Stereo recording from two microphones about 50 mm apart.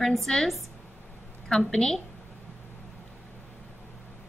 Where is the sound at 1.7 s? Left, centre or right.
Centre.